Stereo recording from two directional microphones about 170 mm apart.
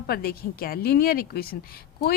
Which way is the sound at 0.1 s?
65° left (ahead or behind).